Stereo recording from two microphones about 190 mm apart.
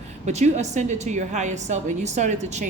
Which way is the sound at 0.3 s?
35° right (ahead or behind).